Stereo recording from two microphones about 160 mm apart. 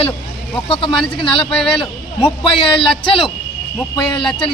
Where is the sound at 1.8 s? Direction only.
30° left (ahead or behind).